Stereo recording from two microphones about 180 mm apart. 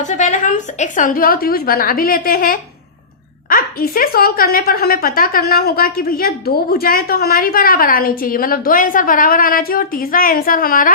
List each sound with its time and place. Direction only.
0.0 s speech: 40° left (ahead or behind)